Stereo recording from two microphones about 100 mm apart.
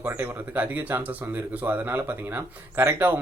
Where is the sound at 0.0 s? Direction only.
20° right (ahead or behind).